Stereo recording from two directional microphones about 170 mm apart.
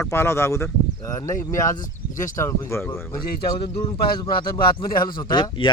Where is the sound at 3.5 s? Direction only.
30° left (ahead or behind).